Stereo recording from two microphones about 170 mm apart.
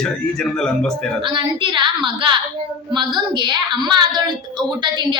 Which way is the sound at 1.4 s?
30° right (ahead or behind).